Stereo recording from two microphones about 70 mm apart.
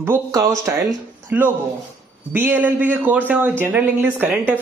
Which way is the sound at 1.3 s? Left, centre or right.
Right.